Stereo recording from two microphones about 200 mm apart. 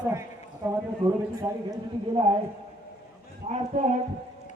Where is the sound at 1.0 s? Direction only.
20° right (ahead or behind).